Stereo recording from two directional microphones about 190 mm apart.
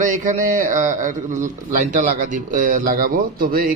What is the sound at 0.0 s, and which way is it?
A man's voice, 45° right (ahead or behind).